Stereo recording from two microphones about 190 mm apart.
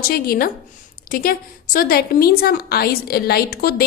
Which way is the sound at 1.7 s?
50° left (ahead or behind).